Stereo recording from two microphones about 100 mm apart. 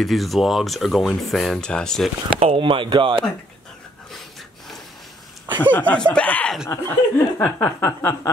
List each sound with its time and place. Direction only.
0.0 s speech: centre (ahead or behind)
2.2 s speech: 65° right (ahead or behind)
5.6 s speech: 15° left (ahead or behind)
6.7 s a sound: 25° left (ahead or behind)